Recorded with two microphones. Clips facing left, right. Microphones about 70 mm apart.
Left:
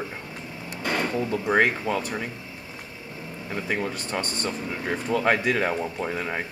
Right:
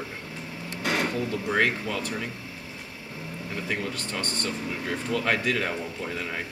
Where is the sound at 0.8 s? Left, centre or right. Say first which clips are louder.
Even; right.